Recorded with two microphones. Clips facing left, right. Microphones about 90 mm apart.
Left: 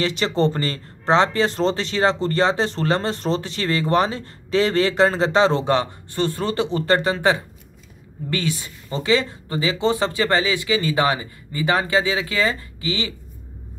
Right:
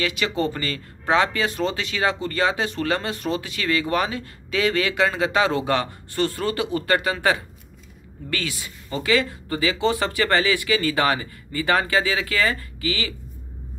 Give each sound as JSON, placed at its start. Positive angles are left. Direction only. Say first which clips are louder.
{"t": 0.4, "sound": "speech", "louder": "left 7 dB", "side_deg": 30}